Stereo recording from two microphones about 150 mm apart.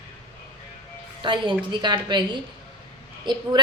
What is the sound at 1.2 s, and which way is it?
A woman's voice, 30° right (ahead or behind).